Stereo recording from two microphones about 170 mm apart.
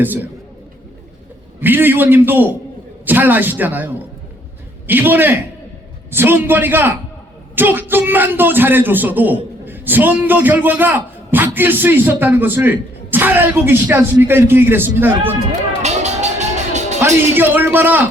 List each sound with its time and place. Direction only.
0.0 s a man's voice: 10° right (ahead or behind)
1.6 s a man's voice: 10° right (ahead or behind)
4.9 s a man's voice: 10° right (ahead or behind)
15.8 s music: 40° right (ahead or behind)
17.3 s a man's voice: 10° right (ahead or behind)